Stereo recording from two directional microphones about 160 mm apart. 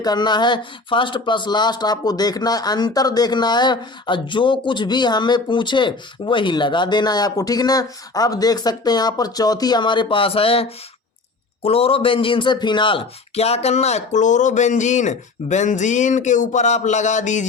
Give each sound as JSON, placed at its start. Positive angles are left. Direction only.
{"t": 0.0, "sound": "a man's voice", "side_deg": 25}